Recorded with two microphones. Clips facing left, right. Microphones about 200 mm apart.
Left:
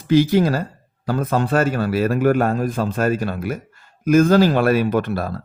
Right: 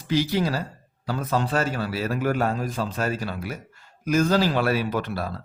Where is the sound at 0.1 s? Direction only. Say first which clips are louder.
Left 8 dB; 50° left (ahead or behind).